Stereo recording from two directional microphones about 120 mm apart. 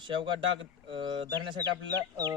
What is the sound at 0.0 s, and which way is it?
Speech, 45° right (ahead or behind).